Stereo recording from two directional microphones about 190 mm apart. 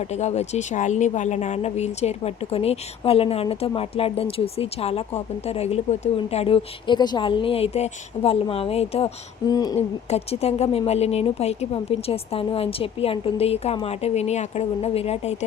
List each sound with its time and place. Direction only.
0.0 s speech: 35° left (ahead or behind)
9.5 s speech: 20° left (ahead or behind)
9.7 s speech: 35° left (ahead or behind)